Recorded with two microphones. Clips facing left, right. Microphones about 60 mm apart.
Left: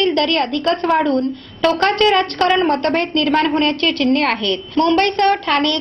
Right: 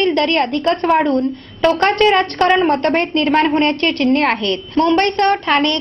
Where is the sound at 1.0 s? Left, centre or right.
Centre.